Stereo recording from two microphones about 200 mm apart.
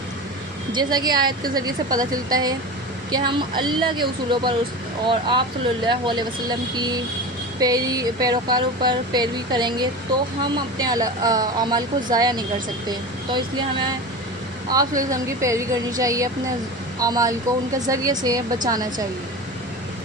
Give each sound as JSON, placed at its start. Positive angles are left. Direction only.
{"t": 0.7, "sound": "speech", "side_deg": -20}
{"t": 7.6, "sound": "speech", "side_deg": -20}